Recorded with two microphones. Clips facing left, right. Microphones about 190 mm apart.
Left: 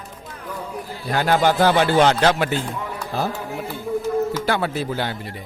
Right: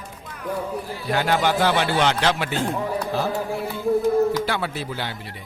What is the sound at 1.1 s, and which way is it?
A man's voice, 45° left (ahead or behind).